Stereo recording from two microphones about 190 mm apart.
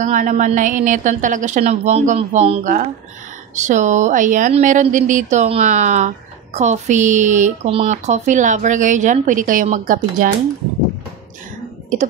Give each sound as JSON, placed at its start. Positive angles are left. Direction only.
{"t": 0.0, "sound": "speech", "side_deg": -40}
{"t": 2.6, "sound": "speech", "side_deg": -40}